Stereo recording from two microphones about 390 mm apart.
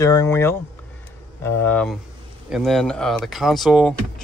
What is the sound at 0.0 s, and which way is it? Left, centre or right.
Speech, centre.